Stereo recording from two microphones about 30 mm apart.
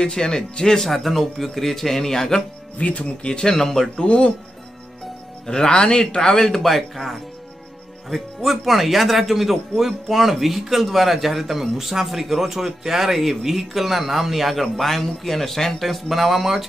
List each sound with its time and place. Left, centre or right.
0.0 s speech: left
0.8 s speech: centre
2.8 s speech: left
3.2 s a man's voice: left
5.7 s speech: left
6.4 s speech: centre